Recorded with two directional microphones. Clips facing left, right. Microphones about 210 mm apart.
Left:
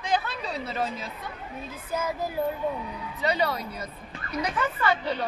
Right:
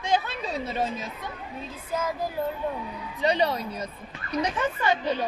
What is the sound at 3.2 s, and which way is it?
A woman's voice, 25° right (ahead or behind).